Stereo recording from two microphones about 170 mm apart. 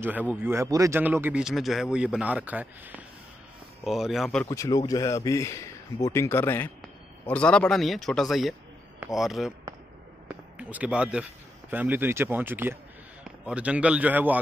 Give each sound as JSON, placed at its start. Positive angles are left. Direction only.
{"t": 0.0, "sound": "speech", "side_deg": -10}
{"t": 4.5, "sound": "speech", "side_deg": 20}
{"t": 10.2, "sound": "a sound", "side_deg": -10}
{"t": 11.7, "sound": "speech", "side_deg": -10}